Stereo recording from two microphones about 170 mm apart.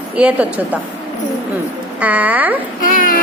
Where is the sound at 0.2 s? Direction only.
10° right (ahead or behind).